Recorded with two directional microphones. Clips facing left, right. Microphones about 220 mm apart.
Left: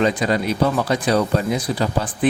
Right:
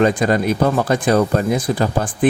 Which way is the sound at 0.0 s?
50° right (ahead or behind).